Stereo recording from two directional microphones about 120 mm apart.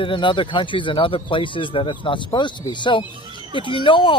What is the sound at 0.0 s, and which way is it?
Speech, 45° left (ahead or behind).